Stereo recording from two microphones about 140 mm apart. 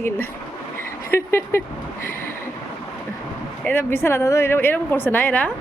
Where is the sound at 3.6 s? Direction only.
15° left (ahead or behind).